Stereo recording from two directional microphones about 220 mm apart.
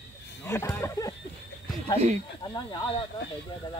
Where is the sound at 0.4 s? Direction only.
10° left (ahead or behind).